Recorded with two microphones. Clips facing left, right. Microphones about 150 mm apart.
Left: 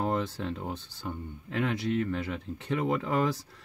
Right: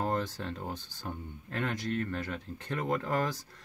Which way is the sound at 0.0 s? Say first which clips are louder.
Left 2 dB; 5° left (ahead or behind).